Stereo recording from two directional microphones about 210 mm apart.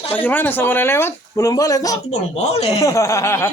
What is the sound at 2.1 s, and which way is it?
Speech, 30° left (ahead or behind).